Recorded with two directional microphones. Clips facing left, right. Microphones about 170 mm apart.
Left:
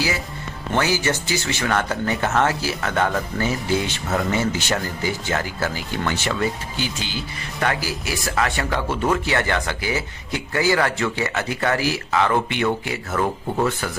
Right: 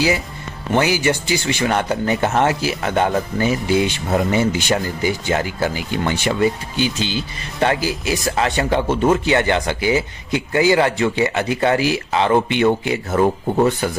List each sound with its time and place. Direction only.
0.7 s speech: 15° right (ahead or behind)